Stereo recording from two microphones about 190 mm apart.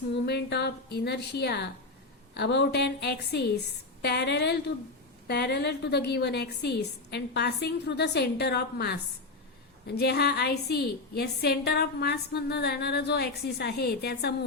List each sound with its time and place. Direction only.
0.1 s a woman's voice: 60° left (ahead or behind)